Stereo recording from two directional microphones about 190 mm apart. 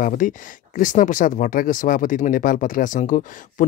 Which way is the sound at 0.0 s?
45° left (ahead or behind).